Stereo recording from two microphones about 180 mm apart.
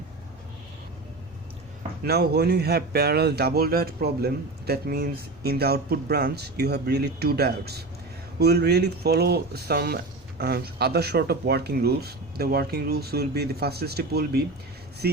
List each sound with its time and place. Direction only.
2.0 s speech: 65° right (ahead or behind)